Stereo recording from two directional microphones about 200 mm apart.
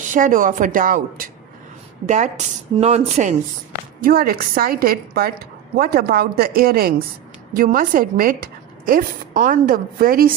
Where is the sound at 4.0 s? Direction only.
45° right (ahead or behind).